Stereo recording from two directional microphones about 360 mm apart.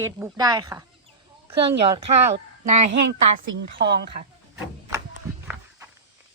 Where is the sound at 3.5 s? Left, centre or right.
Right.